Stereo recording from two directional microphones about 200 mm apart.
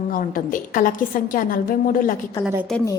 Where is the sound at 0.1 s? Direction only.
45° left (ahead or behind).